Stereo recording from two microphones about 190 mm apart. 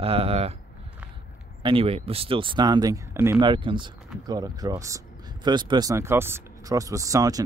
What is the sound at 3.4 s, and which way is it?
Speech, 25° right (ahead or behind).